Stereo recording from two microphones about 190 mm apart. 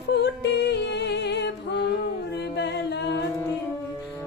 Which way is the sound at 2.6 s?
65° left (ahead or behind).